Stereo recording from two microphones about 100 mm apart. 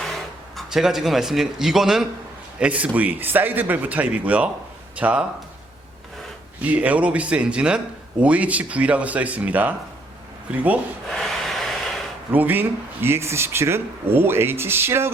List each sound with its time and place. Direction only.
0.5 s a man's voice: 5° right (ahead or behind)
6.6 s speech: 15° right (ahead or behind)
11.1 s a sound: centre (ahead or behind)
12.3 s speech: 20° right (ahead or behind)